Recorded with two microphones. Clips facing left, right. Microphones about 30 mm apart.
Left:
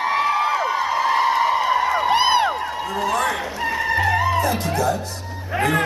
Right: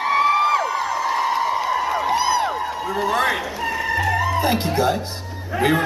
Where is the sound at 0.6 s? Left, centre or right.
Centre.